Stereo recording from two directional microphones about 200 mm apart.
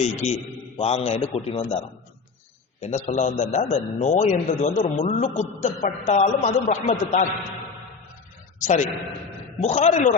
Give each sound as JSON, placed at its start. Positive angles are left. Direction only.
{"t": 0.0, "sound": "a man's voice", "side_deg": 35}
{"t": 2.8, "sound": "a man's voice", "side_deg": 35}
{"t": 8.5, "sound": "a man's voice", "side_deg": 40}